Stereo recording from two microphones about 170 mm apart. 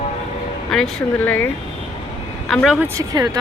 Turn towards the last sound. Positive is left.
turn(degrees=-20)  # may be behind; listen again after turning